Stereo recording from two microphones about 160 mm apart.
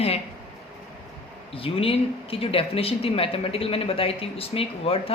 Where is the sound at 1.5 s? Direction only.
35° left (ahead or behind).